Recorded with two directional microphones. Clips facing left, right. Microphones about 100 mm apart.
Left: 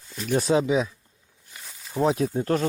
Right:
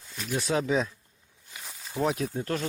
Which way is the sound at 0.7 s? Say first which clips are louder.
Left 3 dB; 5° left (ahead or behind).